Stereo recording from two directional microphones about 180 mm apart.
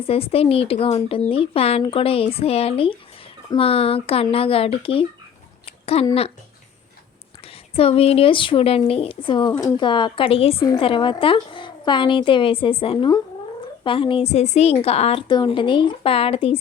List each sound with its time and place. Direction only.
0.0 s speech: 30° left (ahead or behind)
5.6 s a sound: 35° left (ahead or behind)
7.4 s a woman's voice: 30° left (ahead or behind)